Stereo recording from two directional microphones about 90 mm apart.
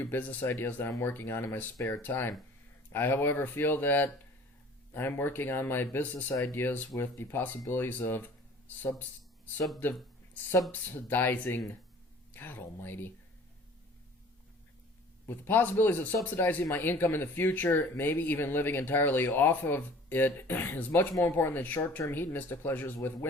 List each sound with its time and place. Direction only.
0.0 s speech: 20° left (ahead or behind)
10.7 s speech: 20° left (ahead or behind)
15.3 s speech: 20° left (ahead or behind)